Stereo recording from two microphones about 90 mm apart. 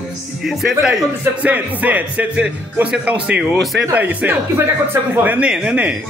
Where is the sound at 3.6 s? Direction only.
Centre (ahead or behind).